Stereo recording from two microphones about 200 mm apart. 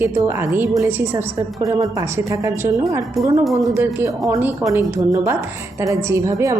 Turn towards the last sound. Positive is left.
turn(degrees=-15)  # may be behind; listen again after turning